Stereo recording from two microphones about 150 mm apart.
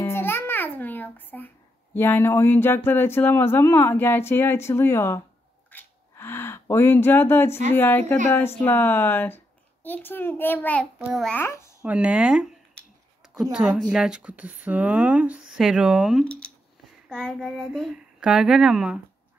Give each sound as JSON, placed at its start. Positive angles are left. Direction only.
{"t": 0.0, "sound": "music", "side_deg": 15}
{"t": 2.0, "sound": "speech", "side_deg": 15}
{"t": 5.7, "sound": "a sound", "side_deg": 15}
{"t": 7.7, "sound": "speech", "side_deg": 15}
{"t": 11.0, "sound": "a child's voice", "side_deg": -5}
{"t": 11.2, "sound": "speech", "side_deg": 15}
{"t": 11.8, "sound": "speech", "side_deg": -10}